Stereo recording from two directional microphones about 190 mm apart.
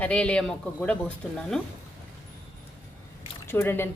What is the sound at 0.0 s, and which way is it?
Speech, 5° left (ahead or behind).